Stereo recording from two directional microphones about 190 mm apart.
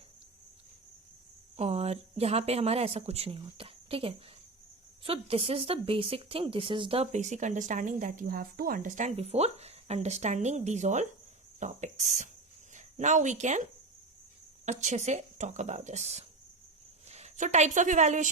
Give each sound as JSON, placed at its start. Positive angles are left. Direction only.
{"t": 1.5, "sound": "a woman's voice", "side_deg": -35}